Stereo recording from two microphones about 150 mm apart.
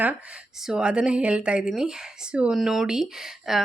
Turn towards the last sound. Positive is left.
turn(degrees=0)  # may be behind; listen again after turning